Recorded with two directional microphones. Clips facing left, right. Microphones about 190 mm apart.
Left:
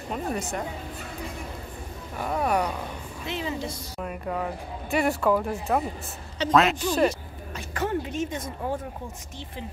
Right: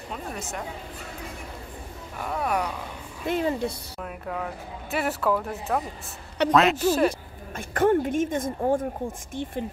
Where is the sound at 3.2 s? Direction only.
50° right (ahead or behind).